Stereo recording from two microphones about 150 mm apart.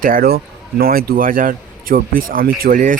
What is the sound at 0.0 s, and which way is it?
A man's voice, 70° right (ahead or behind).